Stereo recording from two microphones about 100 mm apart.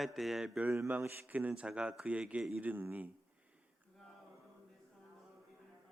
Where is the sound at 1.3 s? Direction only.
15° right (ahead or behind).